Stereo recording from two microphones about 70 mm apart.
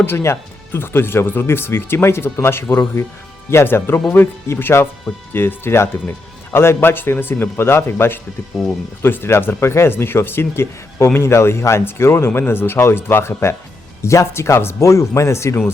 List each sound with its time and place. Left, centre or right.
0.0 s speech: left